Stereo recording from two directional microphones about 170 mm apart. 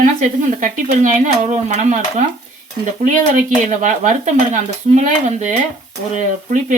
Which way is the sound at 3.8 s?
45° right (ahead or behind).